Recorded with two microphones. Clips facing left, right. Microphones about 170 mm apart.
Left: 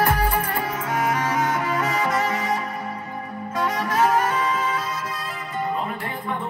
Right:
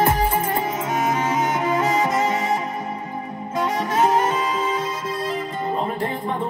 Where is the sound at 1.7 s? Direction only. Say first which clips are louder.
Right 3 dB; 25° right (ahead or behind).